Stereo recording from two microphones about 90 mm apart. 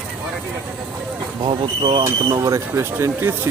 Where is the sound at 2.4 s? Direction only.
35° right (ahead or behind).